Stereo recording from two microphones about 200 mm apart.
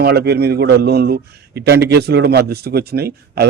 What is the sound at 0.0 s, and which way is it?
A man's voice, 50° right (ahead or behind).